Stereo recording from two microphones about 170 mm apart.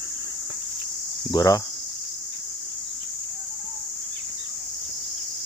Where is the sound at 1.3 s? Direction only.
20° left (ahead or behind).